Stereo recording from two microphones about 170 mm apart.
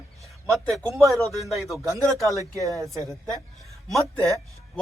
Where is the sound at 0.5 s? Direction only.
Centre (ahead or behind).